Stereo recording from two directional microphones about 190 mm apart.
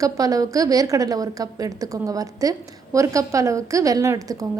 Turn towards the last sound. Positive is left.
turn(degrees=-15)  # may be behind; listen again after turning